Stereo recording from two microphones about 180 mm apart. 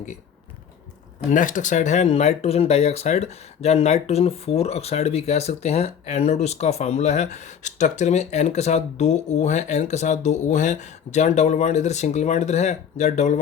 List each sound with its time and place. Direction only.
1.3 s speech: 45° left (ahead or behind)